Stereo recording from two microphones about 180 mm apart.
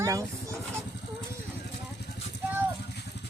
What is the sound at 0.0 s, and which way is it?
Speech, 15° right (ahead or behind).